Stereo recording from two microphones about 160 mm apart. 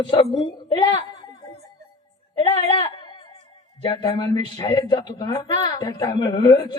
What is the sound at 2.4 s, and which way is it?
Speech, 35° left (ahead or behind).